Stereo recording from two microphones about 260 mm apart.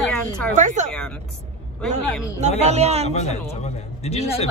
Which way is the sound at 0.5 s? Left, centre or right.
Right.